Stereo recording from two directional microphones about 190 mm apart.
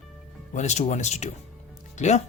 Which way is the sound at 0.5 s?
35° left (ahead or behind).